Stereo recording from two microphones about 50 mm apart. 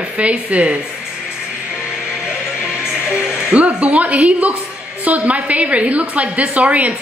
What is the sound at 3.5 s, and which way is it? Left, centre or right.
A woman's voice, right.